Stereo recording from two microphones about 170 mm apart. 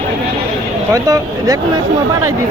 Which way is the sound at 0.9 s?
20° right (ahead or behind).